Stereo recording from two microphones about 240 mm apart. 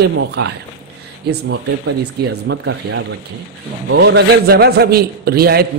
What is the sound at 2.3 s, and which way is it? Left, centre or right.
A man's voice, right.